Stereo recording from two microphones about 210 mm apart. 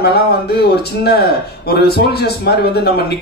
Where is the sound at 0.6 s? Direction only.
50° left (ahead or behind).